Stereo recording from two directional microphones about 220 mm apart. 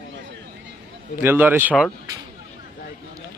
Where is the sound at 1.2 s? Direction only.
10° right (ahead or behind).